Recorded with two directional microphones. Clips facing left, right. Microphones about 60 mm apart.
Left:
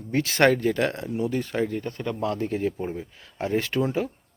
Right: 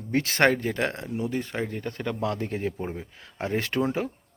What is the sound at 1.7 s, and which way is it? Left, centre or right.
Speech, right.